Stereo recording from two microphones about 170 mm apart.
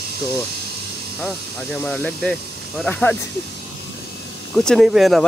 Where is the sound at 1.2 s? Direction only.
5° left (ahead or behind).